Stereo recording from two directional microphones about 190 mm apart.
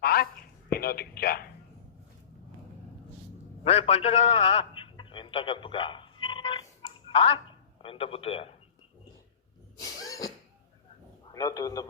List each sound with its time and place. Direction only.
0.0 s a sound: 55° left (ahead or behind)
0.7 s a man's voice: 50° left (ahead or behind)
3.6 s a man's voice: 35° left (ahead or behind)
9.8 s cough: 20° left (ahead or behind)
11.3 s a man's voice: 20° left (ahead or behind)